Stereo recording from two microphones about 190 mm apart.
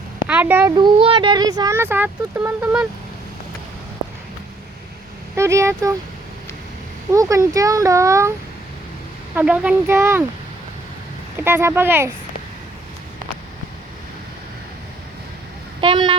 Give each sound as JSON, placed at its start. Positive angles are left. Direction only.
{"t": 0.3, "sound": "speech", "side_deg": -10}
{"t": 0.8, "sound": "speech", "side_deg": -25}
{"t": 5.4, "sound": "a child's voice", "side_deg": -15}
{"t": 7.1, "sound": "a child's voice", "side_deg": -15}
{"t": 9.3, "sound": "a child's voice", "side_deg": -5}
{"t": 11.4, "sound": "a child's voice", "side_deg": -10}
{"t": 15.8, "sound": "speech", "side_deg": -25}